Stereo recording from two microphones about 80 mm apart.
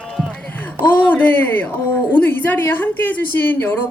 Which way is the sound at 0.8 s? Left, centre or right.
Left.